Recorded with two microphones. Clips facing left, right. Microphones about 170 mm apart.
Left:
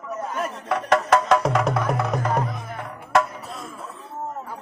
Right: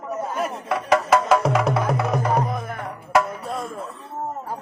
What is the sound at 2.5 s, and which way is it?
Music, 55° right (ahead or behind).